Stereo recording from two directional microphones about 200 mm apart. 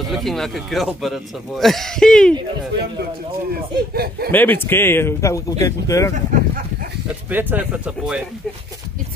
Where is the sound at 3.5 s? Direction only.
50° right (ahead or behind).